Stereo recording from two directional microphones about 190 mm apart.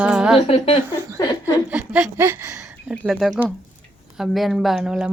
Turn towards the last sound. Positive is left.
turn(degrees=-5)  # may be behind; listen again after turning